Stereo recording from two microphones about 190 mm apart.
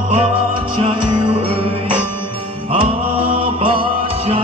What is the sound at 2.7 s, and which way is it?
Mantra, 30° right (ahead or behind).